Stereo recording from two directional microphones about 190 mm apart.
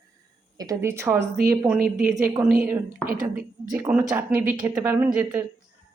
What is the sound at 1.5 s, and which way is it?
Speech, 15° right (ahead or behind).